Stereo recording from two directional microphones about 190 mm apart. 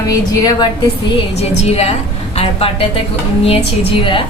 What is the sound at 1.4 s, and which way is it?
A woman's voice, 35° left (ahead or behind).